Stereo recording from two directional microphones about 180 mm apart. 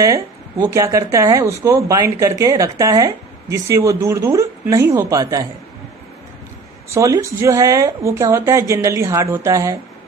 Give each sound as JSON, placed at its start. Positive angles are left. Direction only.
{"t": 0.0, "sound": "speech", "side_deg": -20}
{"t": 6.9, "sound": "speech", "side_deg": -15}